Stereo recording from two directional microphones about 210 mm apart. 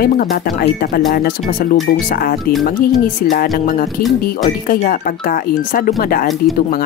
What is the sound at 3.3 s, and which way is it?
Speech, 45° left (ahead or behind).